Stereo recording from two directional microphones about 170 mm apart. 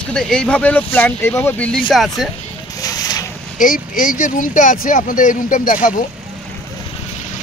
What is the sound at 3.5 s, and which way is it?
Speech, 55° left (ahead or behind).